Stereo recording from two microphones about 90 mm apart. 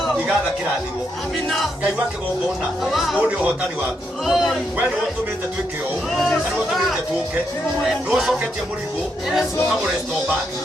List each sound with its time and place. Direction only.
2.8 s music: centre (ahead or behind)
3.2 s speech: 15° right (ahead or behind)
4.3 s music: 5° right (ahead or behind)
7.9 s music: 5° right (ahead or behind)